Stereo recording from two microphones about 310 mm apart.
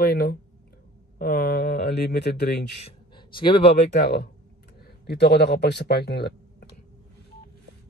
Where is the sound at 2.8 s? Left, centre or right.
Centre.